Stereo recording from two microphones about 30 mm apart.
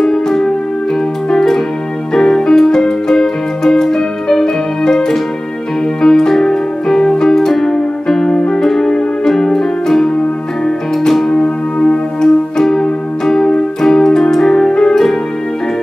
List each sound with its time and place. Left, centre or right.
0.0 s music: centre
2.1 s keyboard: centre
5.9 s piano: centre
8.4 s music: centre
11.2 s music: left
12.2 s music: centre
13.8 s keyboard: centre
14.3 s music: centre